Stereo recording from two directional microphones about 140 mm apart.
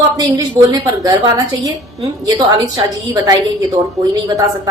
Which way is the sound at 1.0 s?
25° right (ahead or behind).